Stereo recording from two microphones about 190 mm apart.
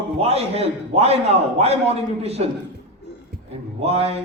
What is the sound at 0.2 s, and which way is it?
A man's voice, 30° right (ahead or behind).